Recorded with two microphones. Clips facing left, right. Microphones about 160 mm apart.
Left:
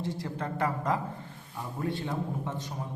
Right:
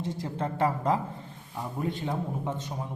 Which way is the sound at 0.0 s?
25° right (ahead or behind).